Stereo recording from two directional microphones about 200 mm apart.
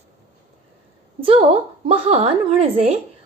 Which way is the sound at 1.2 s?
30° right (ahead or behind).